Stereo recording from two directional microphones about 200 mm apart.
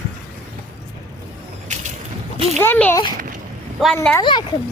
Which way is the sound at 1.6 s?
35° right (ahead or behind).